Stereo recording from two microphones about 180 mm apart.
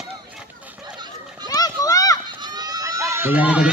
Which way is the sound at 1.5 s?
20° left (ahead or behind).